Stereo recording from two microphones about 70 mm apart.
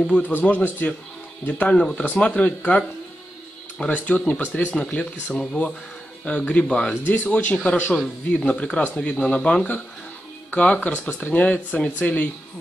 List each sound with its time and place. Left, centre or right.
0.1 s speech: left
1.8 s speech: centre
3.9 s speech: centre
4.7 s speech: centre